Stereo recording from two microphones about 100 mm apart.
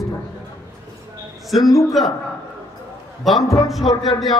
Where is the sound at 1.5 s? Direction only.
Centre (ahead or behind).